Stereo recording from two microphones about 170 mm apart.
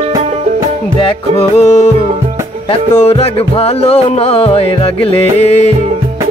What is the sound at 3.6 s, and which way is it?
Music, 35° left (ahead or behind).